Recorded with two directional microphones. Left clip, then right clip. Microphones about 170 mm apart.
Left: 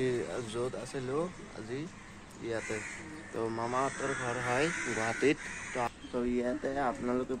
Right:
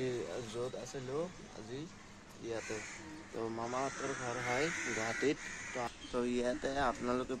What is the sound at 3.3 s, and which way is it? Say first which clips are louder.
Speech: left 6 dB; 5° left (ahead or behind).